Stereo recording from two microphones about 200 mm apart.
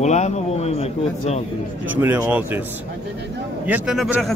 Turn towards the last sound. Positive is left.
turn(degrees=0)  # may be behind; listen again after turning